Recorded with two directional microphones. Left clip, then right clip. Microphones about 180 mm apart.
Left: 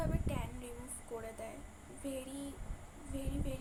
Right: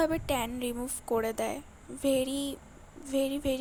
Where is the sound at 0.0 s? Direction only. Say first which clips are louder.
Right 13 dB; 55° right (ahead or behind).